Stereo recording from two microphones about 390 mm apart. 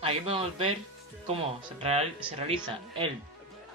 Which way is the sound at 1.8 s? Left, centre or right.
Centre.